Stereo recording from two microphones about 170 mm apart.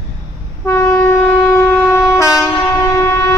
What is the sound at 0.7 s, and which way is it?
Shofar, 15° left (ahead or behind).